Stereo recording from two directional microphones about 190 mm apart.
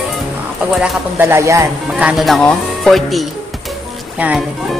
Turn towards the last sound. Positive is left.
turn(degrees=-5)  # may be behind; listen again after turning